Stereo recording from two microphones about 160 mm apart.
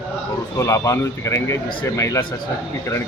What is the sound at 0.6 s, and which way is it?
Speech, 20° left (ahead or behind).